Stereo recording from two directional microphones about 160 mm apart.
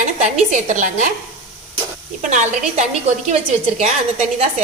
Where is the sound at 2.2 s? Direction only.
45° right (ahead or behind).